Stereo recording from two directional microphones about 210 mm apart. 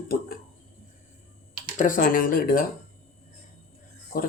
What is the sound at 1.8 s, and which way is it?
Speech, 40° left (ahead or behind).